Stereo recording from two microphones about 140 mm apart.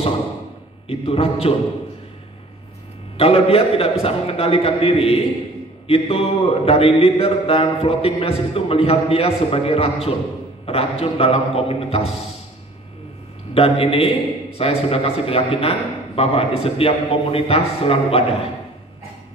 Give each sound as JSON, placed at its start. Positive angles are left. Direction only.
{"t": 0.8, "sound": "mantra", "side_deg": 45}
{"t": 3.2, "sound": "mantra", "side_deg": 45}
{"t": 13.6, "sound": "mantra", "side_deg": 45}